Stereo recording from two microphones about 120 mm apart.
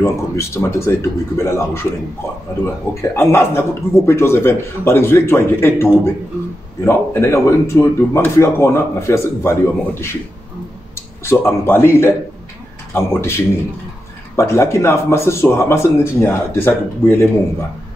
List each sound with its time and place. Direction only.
0.0 s speech: 20° left (ahead or behind)